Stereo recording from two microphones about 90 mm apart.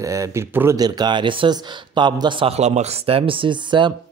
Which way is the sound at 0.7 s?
45° right (ahead or behind).